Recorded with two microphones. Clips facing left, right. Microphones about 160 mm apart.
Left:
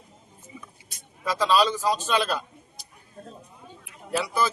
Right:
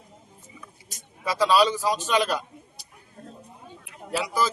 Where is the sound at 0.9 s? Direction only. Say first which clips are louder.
Right 3 dB; 40° right (ahead or behind).